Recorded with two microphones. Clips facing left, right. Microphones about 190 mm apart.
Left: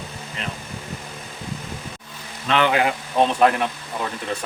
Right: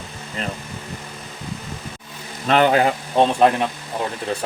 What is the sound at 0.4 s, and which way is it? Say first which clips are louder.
Vehicle: right 4 dB; 40° right (ahead or behind).